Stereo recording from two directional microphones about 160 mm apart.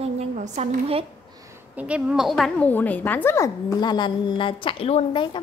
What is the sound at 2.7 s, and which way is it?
A woman's voice, 10° left (ahead or behind).